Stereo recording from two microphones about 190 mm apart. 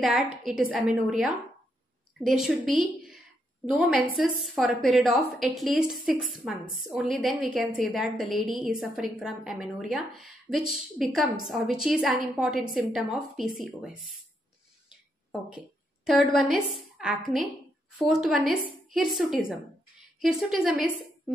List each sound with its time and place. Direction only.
0.0 s a woman's voice: centre (ahead or behind)
14.9 s a sound: 5° right (ahead or behind)
17.9 s a woman's voice: centre (ahead or behind)